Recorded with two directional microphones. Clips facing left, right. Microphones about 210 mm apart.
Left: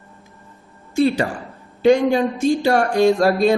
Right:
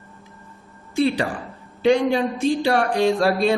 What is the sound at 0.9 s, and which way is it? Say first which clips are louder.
A man's voice: left 3 dB; 45° left (ahead or behind).